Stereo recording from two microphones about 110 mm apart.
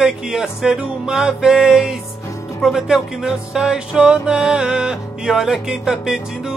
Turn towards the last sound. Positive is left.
turn(degrees=-5)  # may be behind; listen again after turning